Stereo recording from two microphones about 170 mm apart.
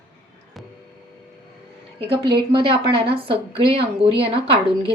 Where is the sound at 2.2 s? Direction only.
30° right (ahead or behind).